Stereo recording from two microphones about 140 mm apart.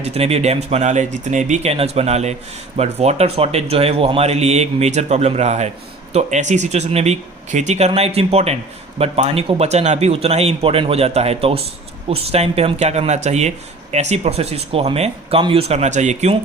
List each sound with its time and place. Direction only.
0.0 s speech: 45° right (ahead or behind)